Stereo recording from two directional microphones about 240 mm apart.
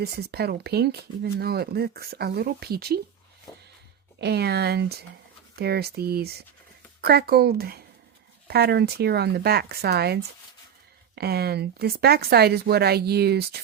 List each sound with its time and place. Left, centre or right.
0.0 s speech: right
4.2 s speech: right